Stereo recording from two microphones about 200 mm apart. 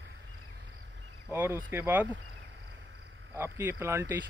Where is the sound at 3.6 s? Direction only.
10° right (ahead or behind).